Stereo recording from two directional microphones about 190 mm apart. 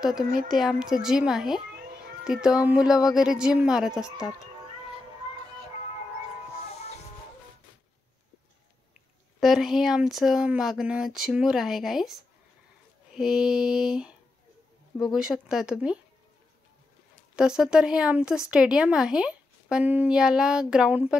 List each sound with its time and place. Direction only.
0.2 s speech: 45° right (ahead or behind)
0.5 s speech: 5° right (ahead or behind)
9.4 s speech: centre (ahead or behind)
15.1 s speech: 5° right (ahead or behind)
17.4 s speech: 5° right (ahead or behind)